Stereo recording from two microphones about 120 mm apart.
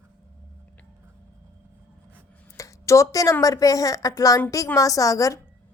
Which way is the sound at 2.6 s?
25° left (ahead or behind).